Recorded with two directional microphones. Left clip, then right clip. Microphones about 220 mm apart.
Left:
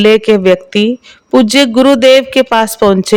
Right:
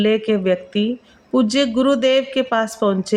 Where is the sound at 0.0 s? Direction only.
50° left (ahead or behind).